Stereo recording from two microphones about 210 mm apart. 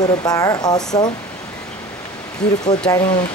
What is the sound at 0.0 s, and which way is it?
Speech, 20° left (ahead or behind).